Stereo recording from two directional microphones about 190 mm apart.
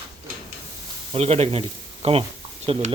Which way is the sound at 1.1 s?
30° right (ahead or behind).